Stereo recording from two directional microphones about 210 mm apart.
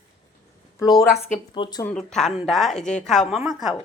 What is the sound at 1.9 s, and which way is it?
Speech, 5° left (ahead or behind).